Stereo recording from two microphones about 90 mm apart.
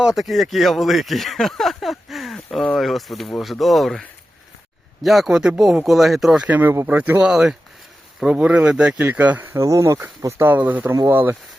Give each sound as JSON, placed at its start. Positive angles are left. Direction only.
{"t": 0.0, "sound": "speech", "side_deg": -5}
{"t": 5.0, "sound": "speech", "side_deg": 0}
{"t": 9.6, "sound": "speech", "side_deg": -35}